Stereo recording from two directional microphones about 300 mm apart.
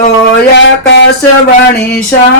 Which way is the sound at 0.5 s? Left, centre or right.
Left.